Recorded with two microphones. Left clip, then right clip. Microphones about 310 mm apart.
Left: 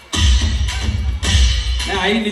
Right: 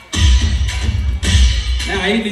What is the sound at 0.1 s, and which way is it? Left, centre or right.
Music, left.